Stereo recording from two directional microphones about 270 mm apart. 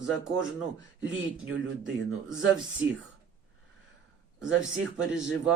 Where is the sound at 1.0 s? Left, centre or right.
Right.